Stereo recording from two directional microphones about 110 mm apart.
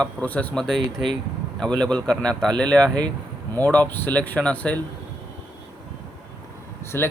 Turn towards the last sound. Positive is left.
turn(degrees=20)  # may be behind; listen again after turning